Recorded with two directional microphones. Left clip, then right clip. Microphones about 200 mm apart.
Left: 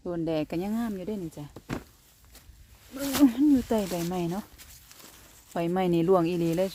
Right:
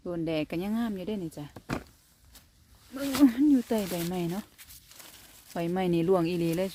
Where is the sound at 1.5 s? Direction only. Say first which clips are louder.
Right 2 dB; 25° right (ahead or behind).